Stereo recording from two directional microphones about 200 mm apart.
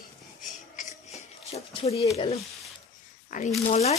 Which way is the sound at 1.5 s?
30° left (ahead or behind).